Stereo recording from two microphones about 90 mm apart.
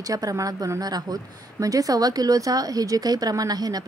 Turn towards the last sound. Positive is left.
turn(degrees=-45)  # may be behind; listen again after turning